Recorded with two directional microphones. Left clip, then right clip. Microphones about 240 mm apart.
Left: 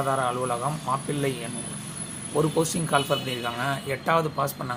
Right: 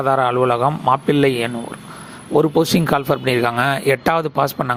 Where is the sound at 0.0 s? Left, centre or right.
Right.